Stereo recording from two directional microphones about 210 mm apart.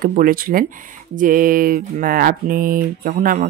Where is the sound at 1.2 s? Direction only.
40° right (ahead or behind).